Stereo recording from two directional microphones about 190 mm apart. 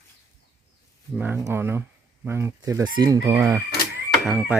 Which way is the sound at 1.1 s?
10° right (ahead or behind).